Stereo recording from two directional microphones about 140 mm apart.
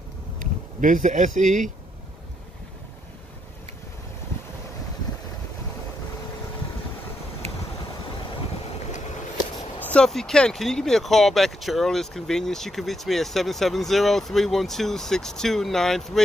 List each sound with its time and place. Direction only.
0.4 s speech: 65° right (ahead or behind)
9.8 s speech: 10° left (ahead or behind)